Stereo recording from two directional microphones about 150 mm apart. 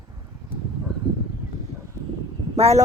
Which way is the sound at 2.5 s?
45° right (ahead or behind).